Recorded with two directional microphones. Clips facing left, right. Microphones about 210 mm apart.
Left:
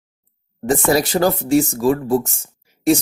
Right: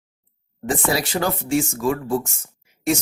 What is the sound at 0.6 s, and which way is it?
Speech, 40° left (ahead or behind).